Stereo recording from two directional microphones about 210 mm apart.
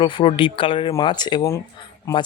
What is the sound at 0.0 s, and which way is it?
Speech, 20° left (ahead or behind).